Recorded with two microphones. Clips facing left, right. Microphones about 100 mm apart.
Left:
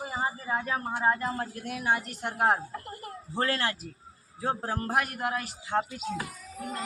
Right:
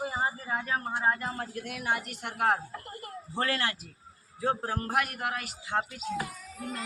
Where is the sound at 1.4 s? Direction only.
35° left (ahead or behind).